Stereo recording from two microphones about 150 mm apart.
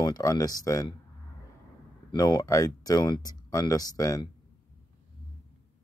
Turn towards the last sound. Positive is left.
turn(degrees=25)  # may be behind; listen again after turning